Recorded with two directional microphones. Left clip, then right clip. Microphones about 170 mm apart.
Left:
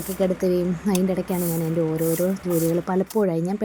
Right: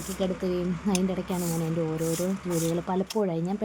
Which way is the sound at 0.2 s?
25° left (ahead or behind).